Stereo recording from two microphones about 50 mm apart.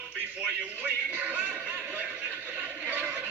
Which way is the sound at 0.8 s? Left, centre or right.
Right.